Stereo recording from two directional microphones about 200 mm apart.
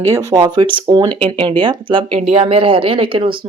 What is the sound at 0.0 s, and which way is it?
Speech, 15° right (ahead or behind).